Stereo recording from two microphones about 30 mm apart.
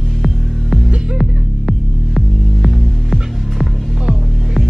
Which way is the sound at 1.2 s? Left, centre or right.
Centre.